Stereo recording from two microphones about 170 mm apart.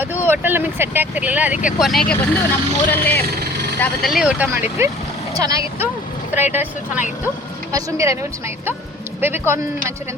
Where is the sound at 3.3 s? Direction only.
70° right (ahead or behind).